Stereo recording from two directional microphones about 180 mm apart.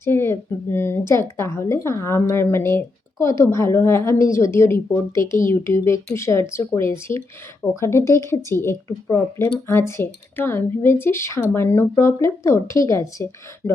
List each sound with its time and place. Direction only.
0.0 s speech: 15° left (ahead or behind)